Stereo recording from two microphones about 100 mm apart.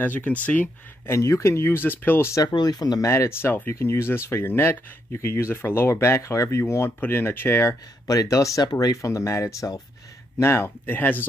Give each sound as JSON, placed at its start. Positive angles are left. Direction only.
{"t": 0.0, "sound": "speech", "side_deg": 15}
{"t": 1.1, "sound": "speech", "side_deg": 30}
{"t": 2.4, "sound": "speech", "side_deg": 45}
{"t": 3.1, "sound": "speech", "side_deg": 25}